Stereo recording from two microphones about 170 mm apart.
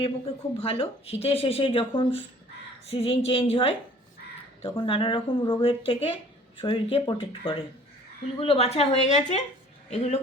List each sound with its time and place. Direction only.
0.5 s speech: 35° left (ahead or behind)